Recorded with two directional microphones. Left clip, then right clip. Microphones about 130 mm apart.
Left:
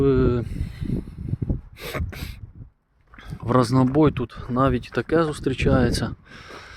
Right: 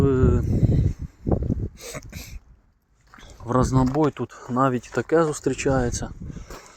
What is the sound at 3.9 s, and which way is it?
Speech, 40° left (ahead or behind).